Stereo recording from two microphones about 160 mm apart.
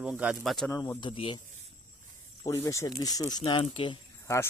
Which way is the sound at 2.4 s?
20° left (ahead or behind).